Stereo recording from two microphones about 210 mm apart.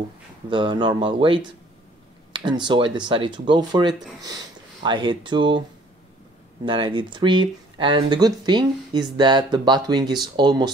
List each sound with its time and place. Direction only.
0.5 s speech: 25° right (ahead or behind)
6.6 s speech: 25° right (ahead or behind)